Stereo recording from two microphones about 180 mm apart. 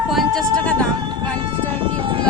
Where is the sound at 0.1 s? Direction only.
Centre (ahead or behind).